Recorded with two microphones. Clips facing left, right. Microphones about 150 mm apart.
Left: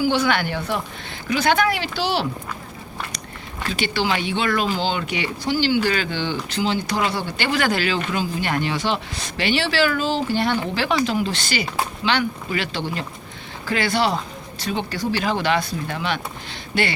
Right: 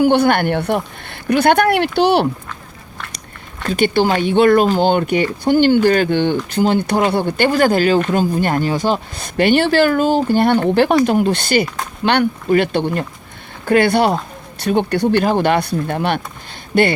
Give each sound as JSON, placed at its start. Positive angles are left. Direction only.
{"t": 0.0, "sound": "speech", "side_deg": -55}
{"t": 3.7, "sound": "speech", "side_deg": -50}